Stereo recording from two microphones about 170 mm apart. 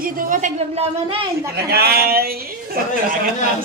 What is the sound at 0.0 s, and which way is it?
Speech, 55° right (ahead or behind).